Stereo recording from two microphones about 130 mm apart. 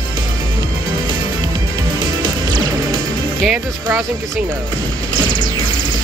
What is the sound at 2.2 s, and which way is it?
Music, 35° right (ahead or behind).